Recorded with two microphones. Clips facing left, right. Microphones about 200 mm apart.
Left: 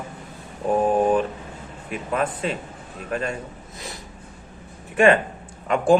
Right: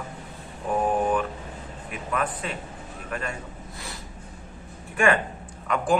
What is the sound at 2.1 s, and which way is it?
Speech, 30° left (ahead or behind).